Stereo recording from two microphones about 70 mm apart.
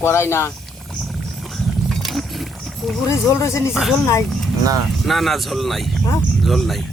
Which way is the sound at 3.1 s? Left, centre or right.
Left.